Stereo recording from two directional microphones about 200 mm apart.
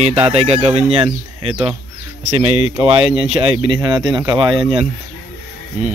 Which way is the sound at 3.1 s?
25° right (ahead or behind).